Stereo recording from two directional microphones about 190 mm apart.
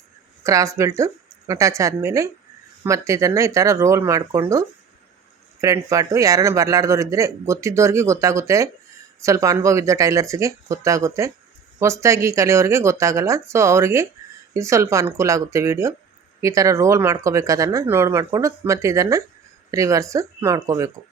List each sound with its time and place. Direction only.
0.4 s a man's voice: 15° right (ahead or behind)